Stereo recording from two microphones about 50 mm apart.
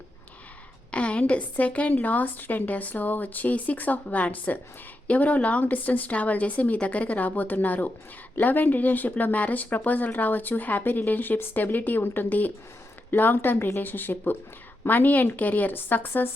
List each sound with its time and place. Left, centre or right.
0.9 s speech: left